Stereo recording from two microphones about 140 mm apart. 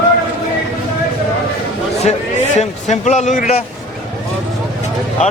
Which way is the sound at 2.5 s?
55° left (ahead or behind).